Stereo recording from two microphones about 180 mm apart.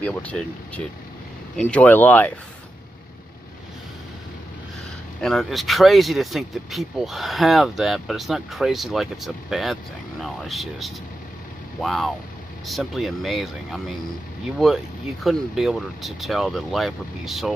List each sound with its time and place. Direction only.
0.0 s speech: 5° left (ahead or behind)
5.2 s speech: centre (ahead or behind)
15.2 s speech: centre (ahead or behind)